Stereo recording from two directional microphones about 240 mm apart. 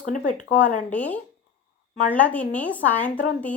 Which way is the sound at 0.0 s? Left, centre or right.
Left.